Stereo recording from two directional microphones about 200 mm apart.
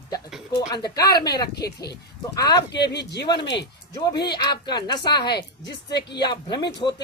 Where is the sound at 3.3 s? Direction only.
20° left (ahead or behind).